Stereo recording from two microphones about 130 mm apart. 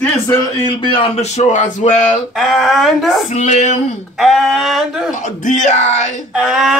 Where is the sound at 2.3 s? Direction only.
Centre (ahead or behind).